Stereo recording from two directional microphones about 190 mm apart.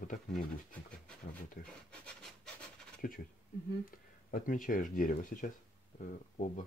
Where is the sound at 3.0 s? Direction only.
50° left (ahead or behind).